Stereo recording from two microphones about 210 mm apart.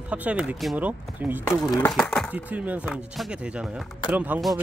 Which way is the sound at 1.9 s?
5° left (ahead or behind).